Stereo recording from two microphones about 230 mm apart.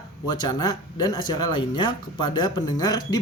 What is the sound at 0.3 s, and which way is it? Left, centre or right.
A man's voice, centre.